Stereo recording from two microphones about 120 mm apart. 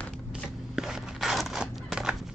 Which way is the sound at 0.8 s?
5° right (ahead or behind).